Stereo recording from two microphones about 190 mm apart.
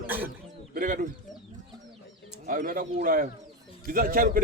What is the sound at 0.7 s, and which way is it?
Speech, 50° right (ahead or behind).